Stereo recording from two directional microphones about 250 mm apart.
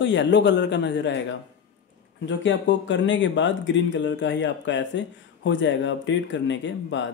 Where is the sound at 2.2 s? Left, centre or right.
Left.